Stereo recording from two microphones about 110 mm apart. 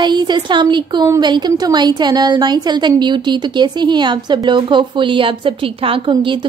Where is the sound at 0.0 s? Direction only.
40° right (ahead or behind).